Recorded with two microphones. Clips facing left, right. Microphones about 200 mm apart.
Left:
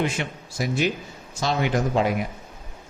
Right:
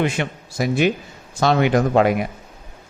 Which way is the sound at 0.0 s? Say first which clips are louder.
Right 4 dB; 65° right (ahead or behind).